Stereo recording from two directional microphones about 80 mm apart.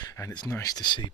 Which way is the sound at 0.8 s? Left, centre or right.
Left.